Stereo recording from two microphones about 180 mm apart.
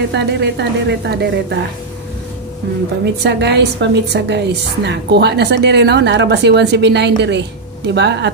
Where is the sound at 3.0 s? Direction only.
70° right (ahead or behind).